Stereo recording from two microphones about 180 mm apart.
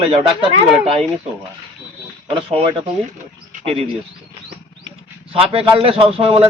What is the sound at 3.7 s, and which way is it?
Speech, 35° right (ahead or behind).